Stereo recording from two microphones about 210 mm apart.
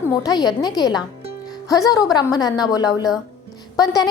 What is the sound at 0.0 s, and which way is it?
A woman's voice, 15° left (ahead or behind).